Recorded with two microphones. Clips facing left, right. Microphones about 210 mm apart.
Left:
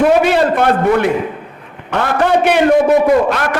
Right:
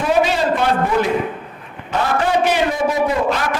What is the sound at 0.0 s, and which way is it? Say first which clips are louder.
A man's voice: left 6 dB; 60° left (ahead or behind).